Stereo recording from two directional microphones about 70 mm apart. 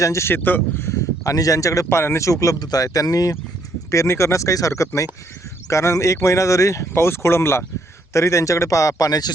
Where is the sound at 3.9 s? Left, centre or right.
Left.